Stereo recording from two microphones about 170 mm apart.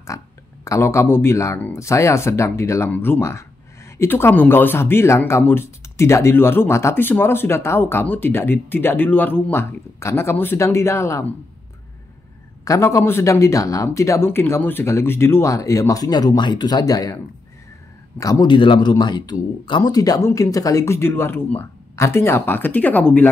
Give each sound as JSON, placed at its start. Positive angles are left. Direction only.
{"t": 0.1, "sound": "speech", "side_deg": 20}
{"t": 12.6, "sound": "speech", "side_deg": 20}